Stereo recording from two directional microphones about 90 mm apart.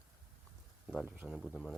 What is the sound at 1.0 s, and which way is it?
Speech, 10° right (ahead or behind).